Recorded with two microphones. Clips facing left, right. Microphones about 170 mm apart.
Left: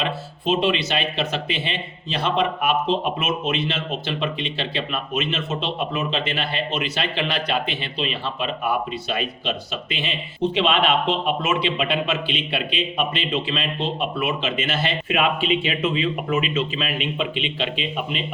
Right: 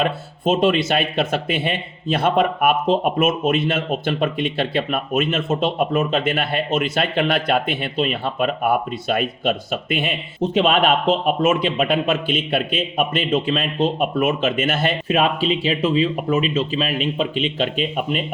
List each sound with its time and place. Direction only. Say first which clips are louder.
0.0 s speech: right 5 dB; 45° right (ahead or behind)